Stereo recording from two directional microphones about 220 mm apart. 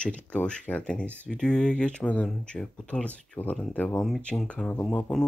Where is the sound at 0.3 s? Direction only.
5° left (ahead or behind).